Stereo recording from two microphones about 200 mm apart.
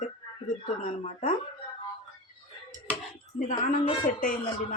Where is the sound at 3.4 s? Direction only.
40° left (ahead or behind).